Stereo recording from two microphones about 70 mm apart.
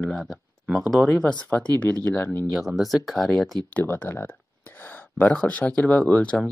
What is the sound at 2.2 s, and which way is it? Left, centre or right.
Speech, left.